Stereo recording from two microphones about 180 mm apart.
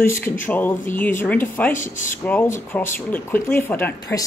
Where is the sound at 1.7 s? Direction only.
45° left (ahead or behind).